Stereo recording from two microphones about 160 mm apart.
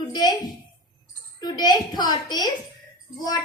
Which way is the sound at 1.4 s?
25° left (ahead or behind).